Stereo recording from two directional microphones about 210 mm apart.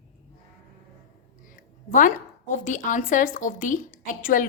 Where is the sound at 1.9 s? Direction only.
40° left (ahead or behind).